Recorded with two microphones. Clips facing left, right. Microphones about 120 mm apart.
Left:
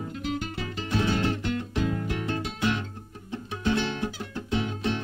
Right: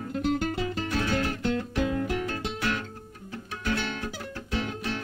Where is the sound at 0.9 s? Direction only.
20° left (ahead or behind).